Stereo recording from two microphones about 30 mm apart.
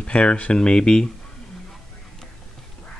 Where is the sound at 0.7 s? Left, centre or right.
Left.